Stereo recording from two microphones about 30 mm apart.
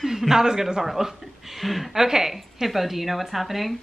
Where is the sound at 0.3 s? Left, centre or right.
Centre.